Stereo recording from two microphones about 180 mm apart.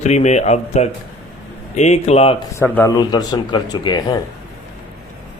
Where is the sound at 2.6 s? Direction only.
15° left (ahead or behind).